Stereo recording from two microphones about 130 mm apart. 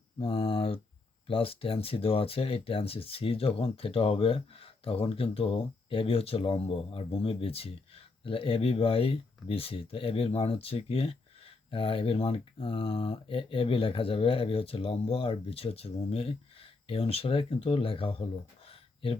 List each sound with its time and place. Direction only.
0.2 s speech: 45° left (ahead or behind)